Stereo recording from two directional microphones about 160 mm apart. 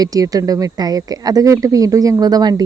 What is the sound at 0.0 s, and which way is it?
Speech, 20° right (ahead or behind).